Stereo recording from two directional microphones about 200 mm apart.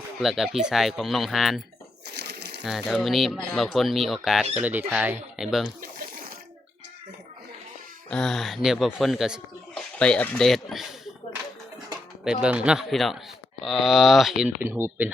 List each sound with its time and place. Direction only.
0.2 s speech: centre (ahead or behind)
2.1 s bird: 55° right (ahead or behind)
2.6 s speech: centre (ahead or behind)
8.1 s speech: centre (ahead or behind)
12.2 s speech: 5° right (ahead or behind)